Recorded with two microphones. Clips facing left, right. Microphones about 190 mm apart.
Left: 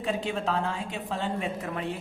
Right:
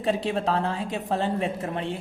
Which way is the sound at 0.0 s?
35° right (ahead or behind).